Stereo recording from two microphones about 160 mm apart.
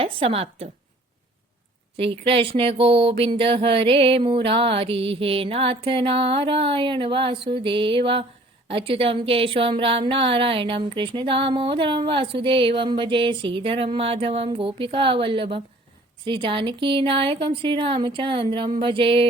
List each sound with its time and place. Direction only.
0.0 s speech: 35° right (ahead or behind)
2.0 s speech: 35° right (ahead or behind)